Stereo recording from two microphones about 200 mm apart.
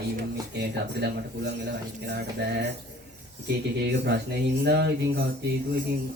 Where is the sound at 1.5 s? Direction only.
60° right (ahead or behind).